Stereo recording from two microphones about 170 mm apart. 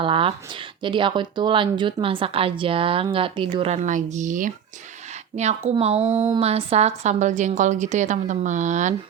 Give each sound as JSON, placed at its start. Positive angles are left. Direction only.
{"t": 0.0, "sound": "a woman's voice", "side_deg": -30}